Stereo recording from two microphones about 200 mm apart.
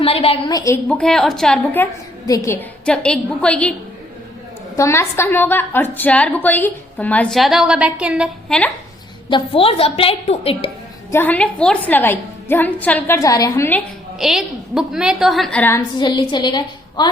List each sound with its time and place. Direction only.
0.0 s a woman's voice: 30° left (ahead or behind); by 3.8 s 5° left (ahead or behind)
4.8 s a woman's voice: 15° left (ahead or behind)
9.3 s a woman's voice: 30° left (ahead or behind)
11.1 s a woman's voice: 10° left (ahead or behind)
14.2 s a woman's voice: centre (ahead or behind)
16.0 s a woman's voice: 20° left (ahead or behind)